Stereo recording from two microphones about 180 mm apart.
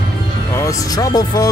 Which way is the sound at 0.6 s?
20° left (ahead or behind).